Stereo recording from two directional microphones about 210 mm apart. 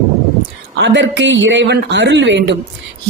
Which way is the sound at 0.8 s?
55° right (ahead or behind).